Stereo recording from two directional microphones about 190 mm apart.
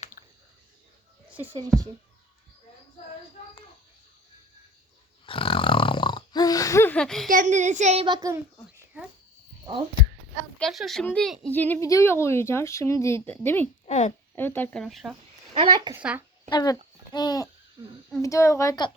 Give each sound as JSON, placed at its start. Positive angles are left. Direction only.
{"t": 0.2, "sound": "a sound", "side_deg": 45}
{"t": 5.2, "sound": "a sound", "side_deg": 30}
{"t": 7.3, "sound": "a child's voice", "side_deg": -45}
{"t": 8.0, "sound": "speech", "side_deg": -20}
{"t": 10.6, "sound": "speech", "side_deg": 0}
{"t": 13.8, "sound": "a woman's voice", "side_deg": 40}
{"t": 14.3, "sound": "speech", "side_deg": 10}
{"t": 15.5, "sound": "speech", "side_deg": -25}
{"t": 16.0, "sound": "speech", "side_deg": -5}
{"t": 16.5, "sound": "a child's voice", "side_deg": 20}